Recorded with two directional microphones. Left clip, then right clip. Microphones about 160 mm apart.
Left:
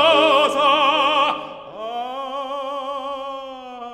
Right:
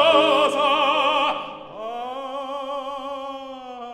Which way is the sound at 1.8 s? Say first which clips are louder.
Left 3 dB; 35° left (ahead or behind).